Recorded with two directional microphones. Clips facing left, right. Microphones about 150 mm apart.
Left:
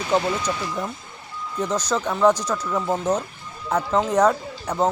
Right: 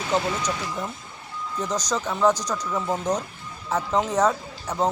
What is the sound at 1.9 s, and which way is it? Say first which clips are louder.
Speech: left 3 dB; 10° left (ahead or behind).